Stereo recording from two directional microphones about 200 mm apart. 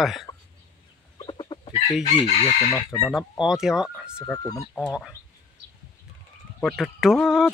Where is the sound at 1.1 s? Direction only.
25° left (ahead or behind).